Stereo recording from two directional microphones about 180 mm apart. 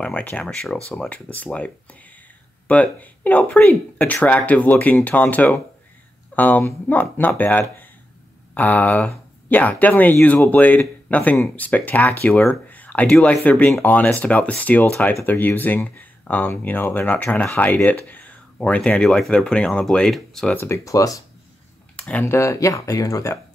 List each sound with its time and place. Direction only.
0.0 s speech: 10° left (ahead or behind)
21.9 s speech: 5° left (ahead or behind)